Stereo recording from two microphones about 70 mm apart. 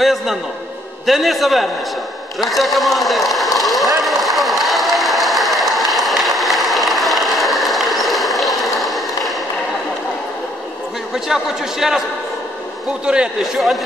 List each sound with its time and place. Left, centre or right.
0.0 s a man's voice: centre
4.0 s a sound: centre
11.2 s a man's voice: centre
13.0 s a man's voice: centre